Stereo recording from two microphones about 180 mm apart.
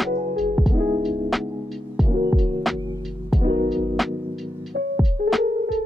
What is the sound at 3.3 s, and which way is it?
Music, 25° right (ahead or behind).